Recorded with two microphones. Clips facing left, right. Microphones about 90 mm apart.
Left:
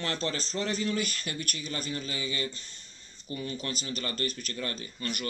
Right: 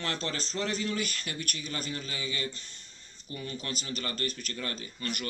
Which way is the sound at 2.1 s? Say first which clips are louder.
Left 2 dB; 15° left (ahead or behind).